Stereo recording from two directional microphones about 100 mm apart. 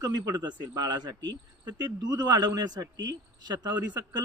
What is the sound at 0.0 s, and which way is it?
Speech, 45° right (ahead or behind).